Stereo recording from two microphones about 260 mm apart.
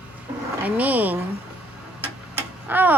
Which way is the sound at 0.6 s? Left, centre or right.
Centre.